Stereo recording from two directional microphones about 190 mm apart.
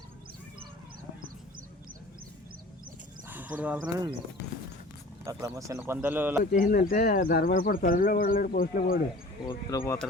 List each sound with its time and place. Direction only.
3.2 s speech: 10° right (ahead or behind)
5.2 s speech: 15° right (ahead or behind)
6.4 s speech: 50° left (ahead or behind)
9.4 s speech: 20° left (ahead or behind)